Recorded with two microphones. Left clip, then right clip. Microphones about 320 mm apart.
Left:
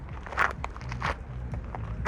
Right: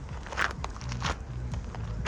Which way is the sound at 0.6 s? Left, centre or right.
Centre.